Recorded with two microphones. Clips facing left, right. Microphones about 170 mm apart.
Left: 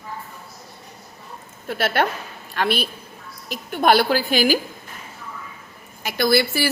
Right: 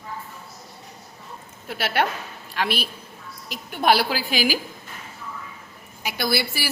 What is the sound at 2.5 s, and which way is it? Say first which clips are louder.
Speech: left 3 dB; 5° right (ahead or behind).